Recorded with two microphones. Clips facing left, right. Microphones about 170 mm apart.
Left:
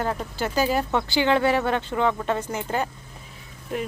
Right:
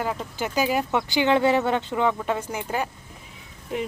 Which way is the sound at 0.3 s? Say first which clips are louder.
Even; 15° right (ahead or behind).